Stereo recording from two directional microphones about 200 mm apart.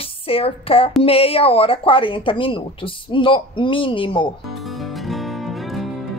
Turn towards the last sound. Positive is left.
turn(degrees=0)  # may be behind; listen again after turning